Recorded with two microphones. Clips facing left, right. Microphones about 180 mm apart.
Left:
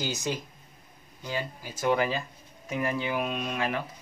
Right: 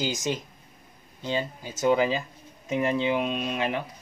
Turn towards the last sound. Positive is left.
turn(degrees=-20)  # may be behind; listen again after turning